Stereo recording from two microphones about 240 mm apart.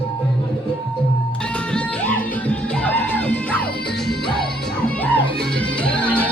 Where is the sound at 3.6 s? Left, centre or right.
Left.